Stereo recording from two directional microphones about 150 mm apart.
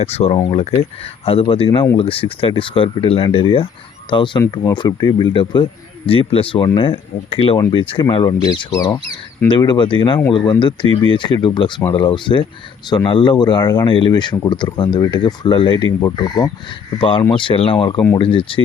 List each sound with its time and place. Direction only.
0.0 s speech: 45° left (ahead or behind)